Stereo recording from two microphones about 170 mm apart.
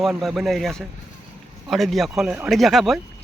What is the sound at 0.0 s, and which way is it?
Speech, centre (ahead or behind).